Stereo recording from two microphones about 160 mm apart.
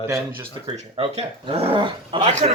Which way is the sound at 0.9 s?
35° right (ahead or behind).